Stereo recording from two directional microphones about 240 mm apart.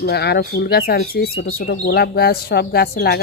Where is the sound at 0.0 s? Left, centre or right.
Left.